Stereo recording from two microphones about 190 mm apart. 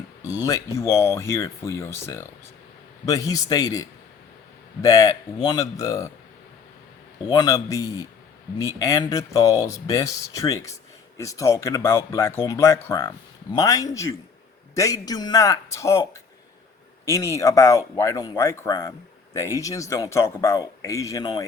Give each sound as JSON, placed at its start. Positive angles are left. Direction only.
{"t": 0.3, "sound": "speech", "side_deg": 20}
{"t": 7.3, "sound": "speech", "side_deg": 20}